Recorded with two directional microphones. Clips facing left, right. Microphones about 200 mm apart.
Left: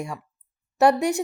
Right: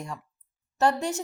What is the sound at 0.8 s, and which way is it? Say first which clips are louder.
Speech: left 6 dB; 65° left (ahead or behind).